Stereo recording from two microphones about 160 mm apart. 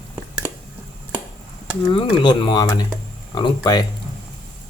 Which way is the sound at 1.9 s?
30° left (ahead or behind).